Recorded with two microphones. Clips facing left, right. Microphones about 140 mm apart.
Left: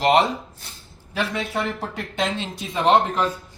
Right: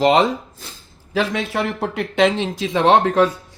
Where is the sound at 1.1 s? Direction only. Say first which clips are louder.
Right 5 dB; 90° right.